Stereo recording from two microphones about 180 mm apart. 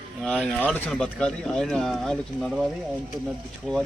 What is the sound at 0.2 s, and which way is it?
Speech, 5° left (ahead or behind).